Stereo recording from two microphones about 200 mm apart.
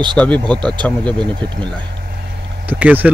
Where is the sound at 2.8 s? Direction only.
10° right (ahead or behind).